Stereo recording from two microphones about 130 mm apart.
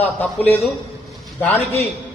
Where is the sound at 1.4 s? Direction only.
15° left (ahead or behind).